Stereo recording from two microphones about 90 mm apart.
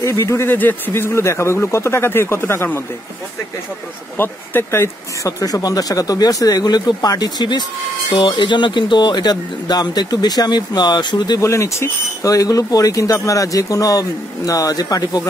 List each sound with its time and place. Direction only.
0.0 s speech: 35° left (ahead or behind)
4.2 s speech: 25° left (ahead or behind); by 11.3 s 55° left (ahead or behind)
11.3 s speech: 35° left (ahead or behind)